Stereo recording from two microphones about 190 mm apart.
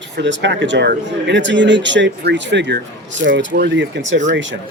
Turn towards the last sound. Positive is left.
turn(degrees=-75)  # may be behind; listen again after turning